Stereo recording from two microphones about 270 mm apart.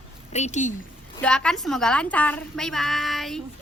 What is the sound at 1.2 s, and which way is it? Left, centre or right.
A woman's voice, centre.